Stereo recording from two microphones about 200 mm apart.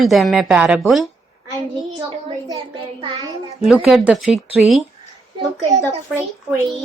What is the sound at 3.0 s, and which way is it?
Child singing, 25° right (ahead or behind).